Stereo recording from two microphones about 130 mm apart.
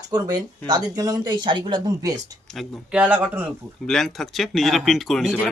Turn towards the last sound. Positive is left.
turn(degrees=0)  # may be behind; listen again after turning